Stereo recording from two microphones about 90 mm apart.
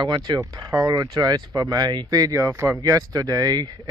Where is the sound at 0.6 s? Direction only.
50° right (ahead or behind).